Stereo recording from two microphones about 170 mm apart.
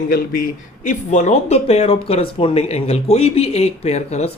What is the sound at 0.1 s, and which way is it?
Speech, 60° left (ahead or behind).